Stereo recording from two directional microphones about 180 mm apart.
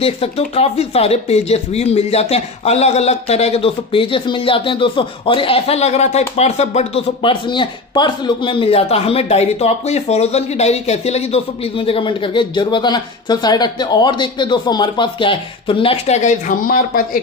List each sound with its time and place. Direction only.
0.0 s speech: 35° left (ahead or behind); by 17.2 s 50° left (ahead or behind)